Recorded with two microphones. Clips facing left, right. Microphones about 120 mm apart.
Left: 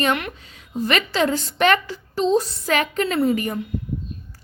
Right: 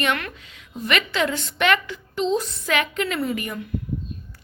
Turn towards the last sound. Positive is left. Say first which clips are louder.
# left 6 dB
turn(degrees=35)  # may be behind; listen again after turning